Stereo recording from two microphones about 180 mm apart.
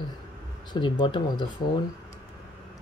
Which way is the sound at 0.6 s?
25° left (ahead or behind).